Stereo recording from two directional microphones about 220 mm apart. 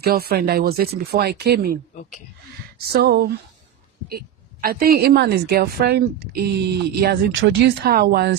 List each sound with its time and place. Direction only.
0.0 s a woman's voice: 45° right (ahead or behind)
2.9 s a woman's voice: 45° right (ahead or behind)
4.6 s a woman's voice: 40° right (ahead or behind)